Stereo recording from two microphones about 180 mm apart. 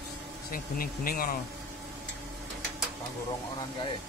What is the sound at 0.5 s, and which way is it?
Speech, 55° left (ahead or behind).